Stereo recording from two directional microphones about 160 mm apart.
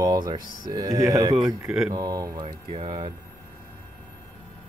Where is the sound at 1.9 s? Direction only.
25° right (ahead or behind).